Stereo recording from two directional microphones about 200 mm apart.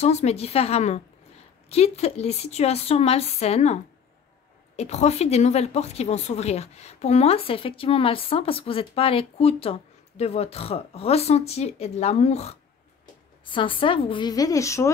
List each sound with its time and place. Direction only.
0.0 s a woman's voice: 35° left (ahead or behind); by 14.9 s 15° left (ahead or behind)